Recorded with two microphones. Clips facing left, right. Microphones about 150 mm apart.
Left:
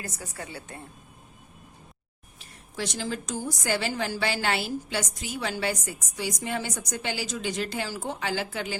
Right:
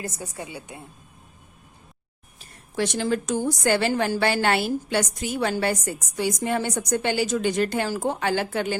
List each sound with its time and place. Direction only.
0.0 s a woman's voice: 20° right (ahead or behind)
2.7 s a woman's voice: 60° right (ahead or behind)